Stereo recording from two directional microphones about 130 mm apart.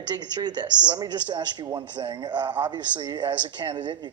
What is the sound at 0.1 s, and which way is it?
Speech, 35° right (ahead or behind).